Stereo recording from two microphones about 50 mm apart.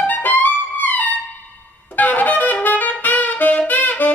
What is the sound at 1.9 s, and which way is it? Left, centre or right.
Wind instrument, left.